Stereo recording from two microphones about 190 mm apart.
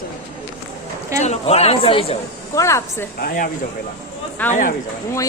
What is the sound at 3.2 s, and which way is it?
Speech, 45° left (ahead or behind).